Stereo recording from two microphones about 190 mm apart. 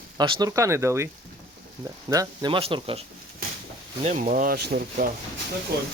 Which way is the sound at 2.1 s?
20° right (ahead or behind).